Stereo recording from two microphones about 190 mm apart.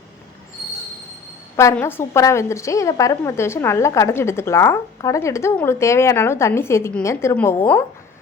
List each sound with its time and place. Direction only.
1.5 s a woman's voice: 15° left (ahead or behind)